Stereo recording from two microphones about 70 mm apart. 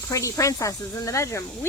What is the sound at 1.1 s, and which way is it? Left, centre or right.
Speech, left.